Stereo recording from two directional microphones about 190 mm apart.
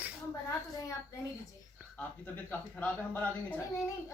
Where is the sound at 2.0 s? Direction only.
10° left (ahead or behind).